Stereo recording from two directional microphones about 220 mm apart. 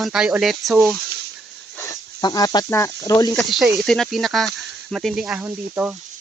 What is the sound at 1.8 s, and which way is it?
Speech, 15° left (ahead or behind).